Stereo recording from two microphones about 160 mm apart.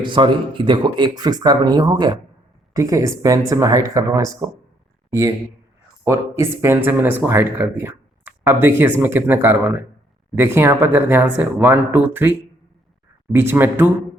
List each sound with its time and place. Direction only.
0.0 s speech: 30° right (ahead or behind)
6.1 s speech: 15° right (ahead or behind)